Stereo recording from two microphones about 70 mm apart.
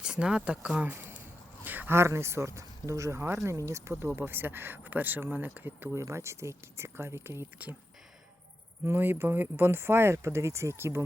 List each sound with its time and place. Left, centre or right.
0.0 s speech: centre
0.9 s a sound: right
2.0 s speech: right
5.9 s speech: right
8.8 s speech: right